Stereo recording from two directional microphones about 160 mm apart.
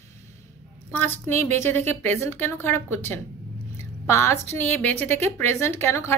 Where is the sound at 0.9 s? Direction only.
10° left (ahead or behind).